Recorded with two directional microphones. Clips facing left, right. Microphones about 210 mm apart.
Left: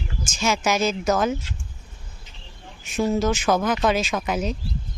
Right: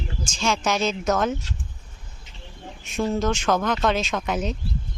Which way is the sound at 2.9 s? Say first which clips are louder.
Left 2 dB; 5° left (ahead or behind).